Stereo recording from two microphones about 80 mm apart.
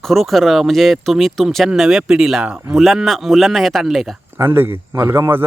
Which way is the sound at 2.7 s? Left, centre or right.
Centre.